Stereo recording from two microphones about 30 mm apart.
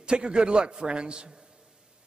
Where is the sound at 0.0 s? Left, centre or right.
Right.